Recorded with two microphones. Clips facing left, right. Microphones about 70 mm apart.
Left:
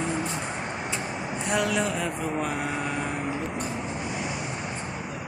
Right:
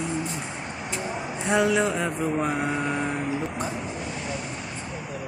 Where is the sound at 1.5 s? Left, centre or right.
Centre.